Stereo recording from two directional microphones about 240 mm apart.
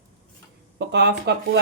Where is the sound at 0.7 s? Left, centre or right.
Right.